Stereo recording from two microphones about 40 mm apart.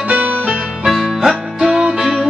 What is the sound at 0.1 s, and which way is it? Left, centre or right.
Music, right.